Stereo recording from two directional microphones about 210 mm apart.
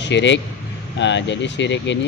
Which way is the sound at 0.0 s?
60° left (ahead or behind).